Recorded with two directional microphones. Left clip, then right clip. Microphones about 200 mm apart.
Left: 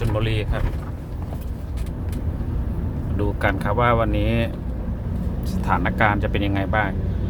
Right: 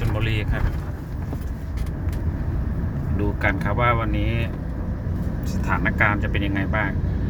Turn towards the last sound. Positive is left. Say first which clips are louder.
# left 2 dB
turn(degrees=20)  # may be behind; listen again after turning